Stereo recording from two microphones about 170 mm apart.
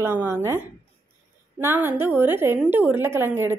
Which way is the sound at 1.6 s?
15° right (ahead or behind).